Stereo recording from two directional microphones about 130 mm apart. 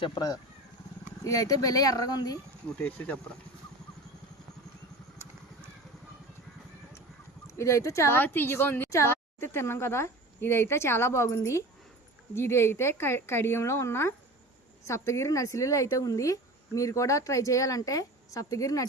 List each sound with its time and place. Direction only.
0.0 s speech: 30° left (ahead or behind)
2.7 s speech: 10° left (ahead or behind)
7.4 s speech: 25° left (ahead or behind)